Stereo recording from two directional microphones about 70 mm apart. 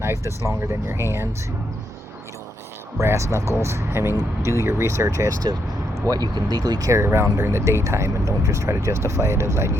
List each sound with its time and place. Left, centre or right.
0.0 s speech: right
3.0 s speech: right
6.1 s speech: right
7.0 s speech: right